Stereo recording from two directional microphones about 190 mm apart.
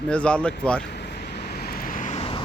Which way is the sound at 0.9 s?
60° left (ahead or behind).